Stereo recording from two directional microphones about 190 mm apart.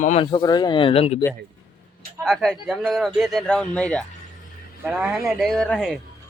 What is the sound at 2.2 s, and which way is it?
Speech, centre (ahead or behind).